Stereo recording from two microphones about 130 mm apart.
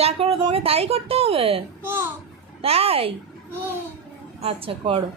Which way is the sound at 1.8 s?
15° right (ahead or behind).